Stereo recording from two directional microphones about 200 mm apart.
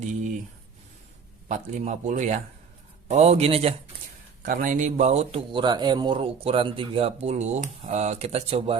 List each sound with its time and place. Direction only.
1.5 s a man's voice: 35° right (ahead or behind)
4.4 s a man's voice: 40° right (ahead or behind)